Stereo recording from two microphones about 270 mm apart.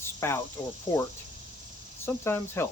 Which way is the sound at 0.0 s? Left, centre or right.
Centre.